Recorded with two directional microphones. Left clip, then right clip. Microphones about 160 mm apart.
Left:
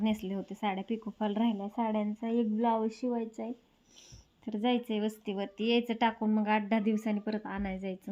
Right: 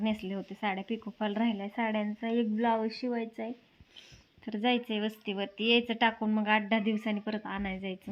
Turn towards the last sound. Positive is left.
turn(degrees=0)  # may be behind; listen again after turning